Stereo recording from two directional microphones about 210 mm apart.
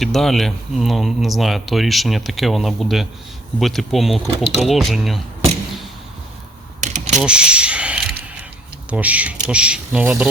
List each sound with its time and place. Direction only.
0.0 s speech: centre (ahead or behind)
6.8 s a sound: 35° right (ahead or behind)
7.2 s speech: 5° right (ahead or behind)